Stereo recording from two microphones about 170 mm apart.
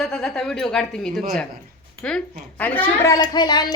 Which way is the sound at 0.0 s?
Centre (ahead or behind).